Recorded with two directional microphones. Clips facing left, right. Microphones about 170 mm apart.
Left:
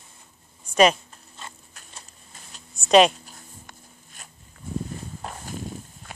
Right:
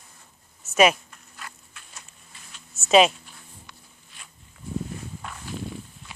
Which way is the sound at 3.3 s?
45° left (ahead or behind).